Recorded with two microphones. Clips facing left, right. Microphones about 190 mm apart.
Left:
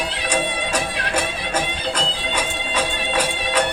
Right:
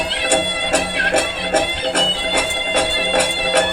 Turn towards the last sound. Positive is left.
turn(degrees=-55)  # may be behind; listen again after turning